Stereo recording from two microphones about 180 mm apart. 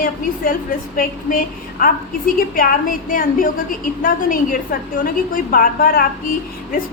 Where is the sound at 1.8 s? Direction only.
50° left (ahead or behind).